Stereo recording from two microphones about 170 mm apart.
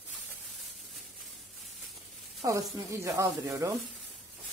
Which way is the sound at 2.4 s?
20° right (ahead or behind).